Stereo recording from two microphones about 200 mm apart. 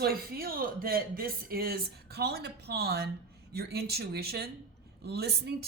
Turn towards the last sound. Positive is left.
turn(degrees=-55)  # may be behind; listen again after turning